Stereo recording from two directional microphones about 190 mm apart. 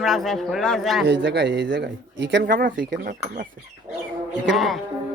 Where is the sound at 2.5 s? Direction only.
45° right (ahead or behind).